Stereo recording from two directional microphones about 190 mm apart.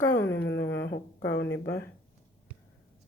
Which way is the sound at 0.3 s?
65° left (ahead or behind).